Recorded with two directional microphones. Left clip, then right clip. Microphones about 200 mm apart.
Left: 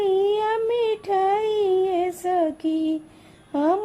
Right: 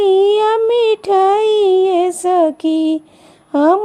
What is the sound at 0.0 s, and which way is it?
Child singing, 35° right (ahead or behind).